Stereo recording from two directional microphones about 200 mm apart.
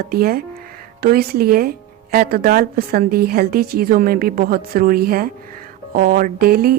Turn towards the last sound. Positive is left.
turn(degrees=-45)  # may be behind; listen again after turning